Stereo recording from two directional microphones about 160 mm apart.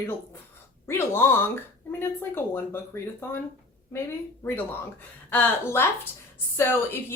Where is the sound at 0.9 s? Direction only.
15° left (ahead or behind).